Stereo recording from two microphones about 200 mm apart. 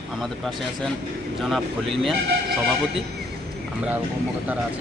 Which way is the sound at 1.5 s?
Centre (ahead or behind).